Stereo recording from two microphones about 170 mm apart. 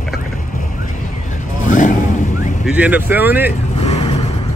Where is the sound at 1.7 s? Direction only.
50° left (ahead or behind).